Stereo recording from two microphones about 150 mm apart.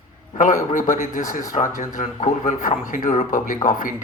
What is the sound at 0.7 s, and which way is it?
Speech, 60° left (ahead or behind).